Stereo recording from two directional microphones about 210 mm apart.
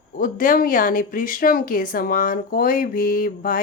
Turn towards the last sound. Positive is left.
turn(degrees=40)  # may be behind; listen again after turning